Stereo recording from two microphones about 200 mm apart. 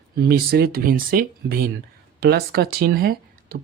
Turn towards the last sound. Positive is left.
turn(degrees=-50)  # may be behind; listen again after turning